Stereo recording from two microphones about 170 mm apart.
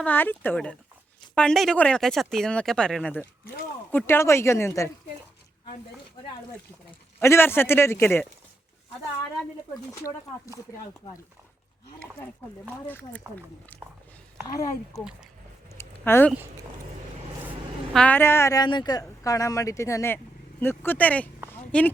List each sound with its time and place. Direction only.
0.0 s a man's voice: 10° left (ahead or behind)
7.2 s a man's voice: 15° left (ahead or behind)
9.9 s a man's voice: 20° left (ahead or behind)
12.9 s a man's voice: 10° left (ahead or behind)
14.9 s speech: centre (ahead or behind)
15.7 s a sound: 15° left (ahead or behind)
17.9 s a man's voice: 10° left (ahead or behind)
21.5 s a sound: 10° left (ahead or behind)